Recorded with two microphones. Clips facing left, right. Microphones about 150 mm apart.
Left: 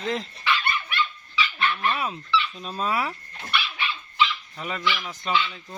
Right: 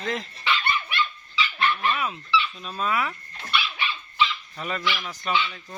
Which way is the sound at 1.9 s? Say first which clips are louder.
Even; 35° left (ahead or behind).